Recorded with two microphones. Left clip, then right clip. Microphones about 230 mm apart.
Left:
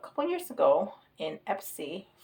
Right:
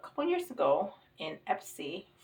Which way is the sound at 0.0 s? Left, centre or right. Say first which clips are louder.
Left 1 dB; left.